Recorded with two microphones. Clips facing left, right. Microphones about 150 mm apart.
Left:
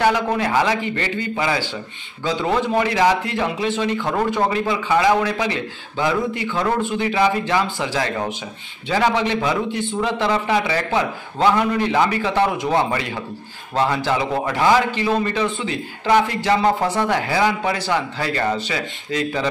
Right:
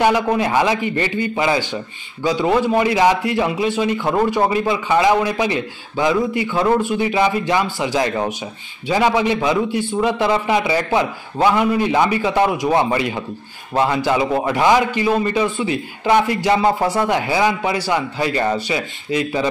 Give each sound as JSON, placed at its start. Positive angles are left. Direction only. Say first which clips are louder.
{"t": 0.0, "sound": "a man's voice", "louder": "right 2 dB", "side_deg": -15}